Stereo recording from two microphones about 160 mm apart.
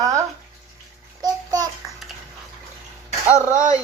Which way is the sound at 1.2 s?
25° right (ahead or behind).